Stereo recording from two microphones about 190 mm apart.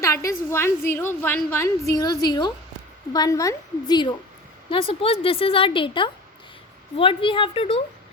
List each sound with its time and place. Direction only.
0.0 s a woman's voice: 15° left (ahead or behind)